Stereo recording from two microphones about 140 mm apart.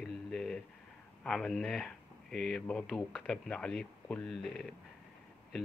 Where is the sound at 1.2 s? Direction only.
5° left (ahead or behind).